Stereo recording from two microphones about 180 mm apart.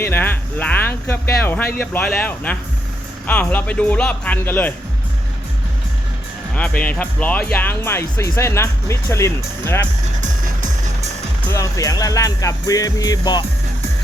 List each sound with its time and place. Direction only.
0.0 s a sound: 10° left (ahead or behind)
3.2 s speech: 10° left (ahead or behind)
6.5 s speech: 5° left (ahead or behind)
10.2 s music: 45° right (ahead or behind)
11.4 s music: 15° left (ahead or behind)